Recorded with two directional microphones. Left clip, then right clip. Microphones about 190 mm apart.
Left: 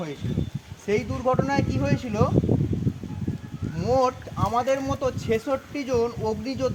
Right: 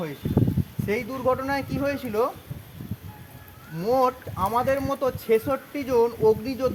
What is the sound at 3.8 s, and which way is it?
Speech, 15° right (ahead or behind).